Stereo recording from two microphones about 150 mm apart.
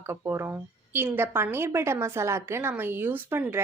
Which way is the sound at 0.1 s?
15° right (ahead or behind).